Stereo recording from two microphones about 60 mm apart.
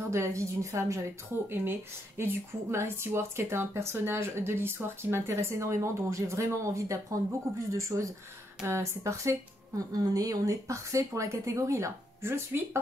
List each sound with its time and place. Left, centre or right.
0.1 s speech: right
1.5 s speech: right
9.9 s speech: right